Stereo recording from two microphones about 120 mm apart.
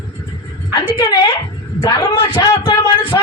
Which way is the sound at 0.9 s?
35° left (ahead or behind).